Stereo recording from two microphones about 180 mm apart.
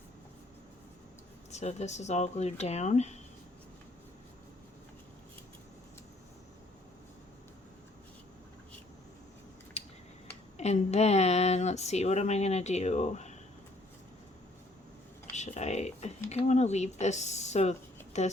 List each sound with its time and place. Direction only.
1.5 s speech: 40° left (ahead or behind)
9.7 s a sound: 40° left (ahead or behind)
10.6 s speech: 35° left (ahead or behind)
15.4 s speech: 40° left (ahead or behind)